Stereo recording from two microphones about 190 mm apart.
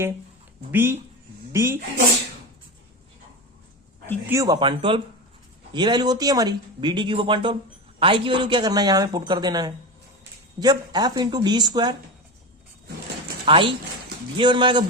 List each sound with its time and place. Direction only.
0.7 s speech: 10° right (ahead or behind)
4.3 s speech: 20° right (ahead or behind)
13.4 s speech: 30° right (ahead or behind)